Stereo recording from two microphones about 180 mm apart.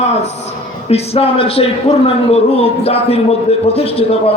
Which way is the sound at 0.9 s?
35° left (ahead or behind).